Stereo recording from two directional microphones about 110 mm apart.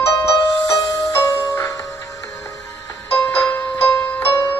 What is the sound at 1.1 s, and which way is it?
Music, 25° left (ahead or behind).